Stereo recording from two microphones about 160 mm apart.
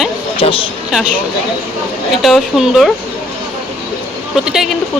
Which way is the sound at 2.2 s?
Centre (ahead or behind).